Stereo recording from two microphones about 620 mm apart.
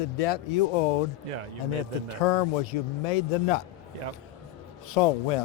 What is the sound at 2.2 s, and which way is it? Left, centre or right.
Speech, left.